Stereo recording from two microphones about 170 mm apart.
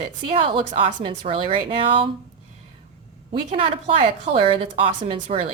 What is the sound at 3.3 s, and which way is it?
A woman's voice, 30° right (ahead or behind).